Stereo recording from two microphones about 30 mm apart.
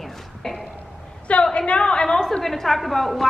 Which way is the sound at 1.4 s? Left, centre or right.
Left.